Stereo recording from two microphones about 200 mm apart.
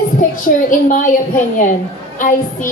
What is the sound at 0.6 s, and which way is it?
A woman's voice, 40° left (ahead or behind).